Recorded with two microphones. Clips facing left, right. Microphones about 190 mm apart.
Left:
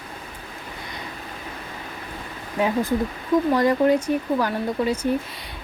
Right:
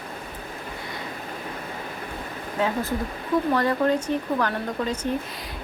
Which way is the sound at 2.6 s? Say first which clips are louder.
Left 4 dB; 15° left (ahead or behind).